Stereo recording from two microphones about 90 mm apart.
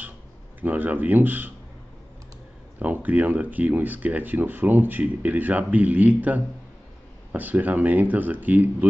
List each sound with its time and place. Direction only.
0.6 s speech: 20° right (ahead or behind)
2.8 s speech: 20° right (ahead or behind)